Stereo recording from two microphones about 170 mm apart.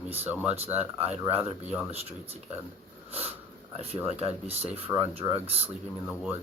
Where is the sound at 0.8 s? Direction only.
40° right (ahead or behind).